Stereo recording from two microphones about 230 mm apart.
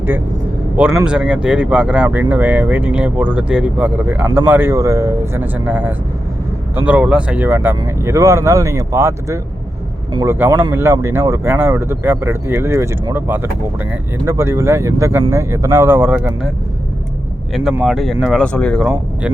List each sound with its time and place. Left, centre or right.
0.8 s a man's voice: centre
17.5 s speech: centre